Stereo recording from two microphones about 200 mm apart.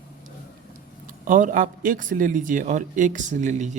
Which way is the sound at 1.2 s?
40° right (ahead or behind).